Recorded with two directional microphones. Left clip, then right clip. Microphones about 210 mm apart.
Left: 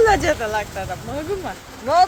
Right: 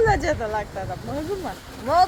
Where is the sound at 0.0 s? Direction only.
Centre (ahead or behind).